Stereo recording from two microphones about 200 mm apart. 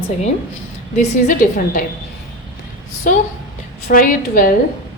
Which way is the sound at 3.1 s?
40° left (ahead or behind).